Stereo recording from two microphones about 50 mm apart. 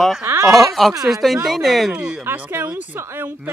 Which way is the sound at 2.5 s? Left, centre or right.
Right.